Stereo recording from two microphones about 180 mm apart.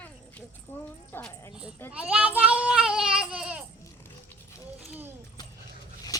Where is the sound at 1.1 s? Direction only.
10° left (ahead or behind).